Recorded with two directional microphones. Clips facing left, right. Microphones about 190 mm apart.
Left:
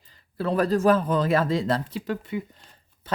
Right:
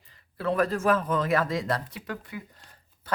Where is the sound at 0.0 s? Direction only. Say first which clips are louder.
Left 2 dB; 30° left (ahead or behind).